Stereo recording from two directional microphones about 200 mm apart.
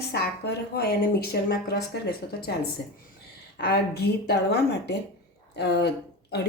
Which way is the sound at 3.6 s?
55° left (ahead or behind).